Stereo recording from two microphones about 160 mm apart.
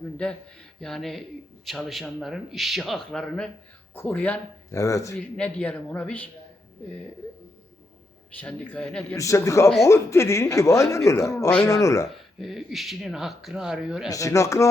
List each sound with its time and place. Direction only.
0.8 s speech: centre (ahead or behind); by 5.1 s 20° left (ahead or behind)
5.4 s speech: 5° left (ahead or behind)
8.4 s speech: 10° left (ahead or behind)
9.1 s speech: 20° left (ahead or behind)
12.0 s speech: centre (ahead or behind)
14.1 s speech: 20° left (ahead or behind)